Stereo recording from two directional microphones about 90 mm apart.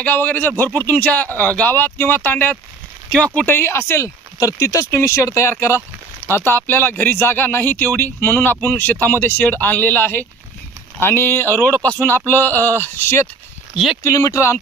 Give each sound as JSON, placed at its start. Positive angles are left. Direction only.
{"t": 0.0, "sound": "a man's voice", "side_deg": 20}